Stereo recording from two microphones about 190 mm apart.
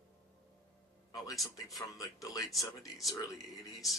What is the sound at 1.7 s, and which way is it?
Speech, 15° left (ahead or behind).